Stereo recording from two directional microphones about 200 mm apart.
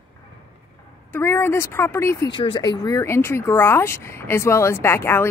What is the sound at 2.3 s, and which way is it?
A woman's voice, 25° left (ahead or behind).